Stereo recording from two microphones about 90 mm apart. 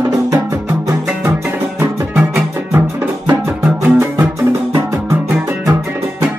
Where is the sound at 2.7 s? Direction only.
35° right (ahead or behind).